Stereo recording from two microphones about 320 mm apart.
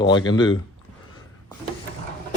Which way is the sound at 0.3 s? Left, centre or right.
Centre.